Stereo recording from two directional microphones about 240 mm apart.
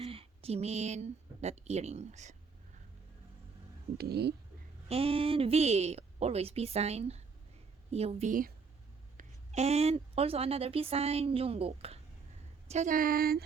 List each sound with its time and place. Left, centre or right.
0.0 s speech: right
3.9 s speech: right
4.9 s a woman's voice: right